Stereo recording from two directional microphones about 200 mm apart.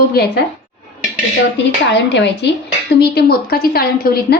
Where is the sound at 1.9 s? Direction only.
60° left (ahead or behind).